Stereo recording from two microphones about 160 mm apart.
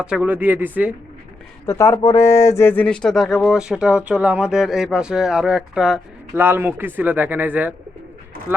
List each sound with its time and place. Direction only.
0.0 s speech: 5° right (ahead or behind)
1.6 s speech: 20° left (ahead or behind); by 8.6 s 15° right (ahead or behind)